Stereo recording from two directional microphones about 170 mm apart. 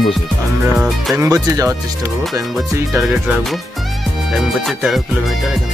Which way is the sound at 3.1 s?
Centre (ahead or behind).